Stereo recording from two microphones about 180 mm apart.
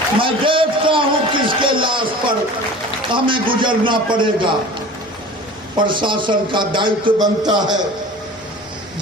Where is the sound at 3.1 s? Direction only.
25° right (ahead or behind).